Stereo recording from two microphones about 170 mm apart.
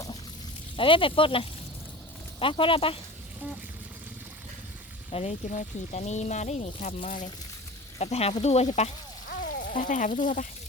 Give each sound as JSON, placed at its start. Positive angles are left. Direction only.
{"t": 0.8, "sound": "speech", "side_deg": 30}
{"t": 5.1, "sound": "speech", "side_deg": 45}
{"t": 7.9, "sound": "speech", "side_deg": 40}
{"t": 9.4, "sound": "speech", "side_deg": 50}